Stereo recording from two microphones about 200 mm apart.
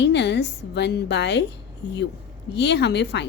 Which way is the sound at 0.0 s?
60° left (ahead or behind).